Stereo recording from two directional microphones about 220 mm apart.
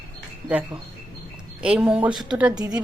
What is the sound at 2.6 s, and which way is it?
Speech, 15° right (ahead or behind).